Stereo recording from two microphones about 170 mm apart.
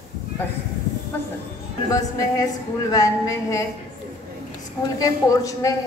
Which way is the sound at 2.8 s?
20° left (ahead or behind).